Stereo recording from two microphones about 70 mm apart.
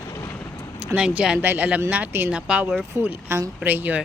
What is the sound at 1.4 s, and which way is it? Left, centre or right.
Speech, right.